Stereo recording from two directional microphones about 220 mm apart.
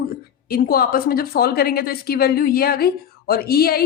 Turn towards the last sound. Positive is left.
turn(degrees=45)  # may be behind; listen again after turning